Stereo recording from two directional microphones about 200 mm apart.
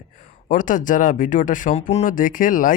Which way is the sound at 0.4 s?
40° left (ahead or behind).